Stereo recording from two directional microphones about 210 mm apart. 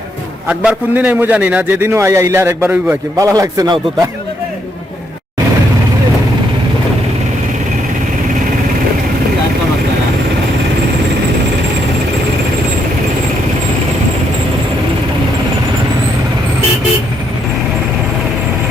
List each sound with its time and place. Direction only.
0.4 s a man's voice: 5° right (ahead or behind)